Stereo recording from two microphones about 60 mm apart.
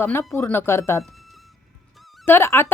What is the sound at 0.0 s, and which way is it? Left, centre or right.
A woman's voice, left.